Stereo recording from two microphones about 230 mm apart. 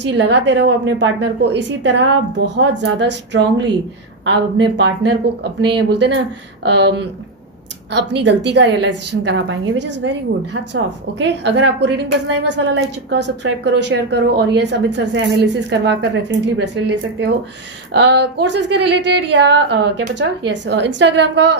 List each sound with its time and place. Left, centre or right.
0.0 s a woman's voice: right